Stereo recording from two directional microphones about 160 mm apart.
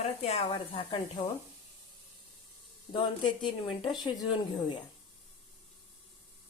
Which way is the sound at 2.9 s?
30° left (ahead or behind).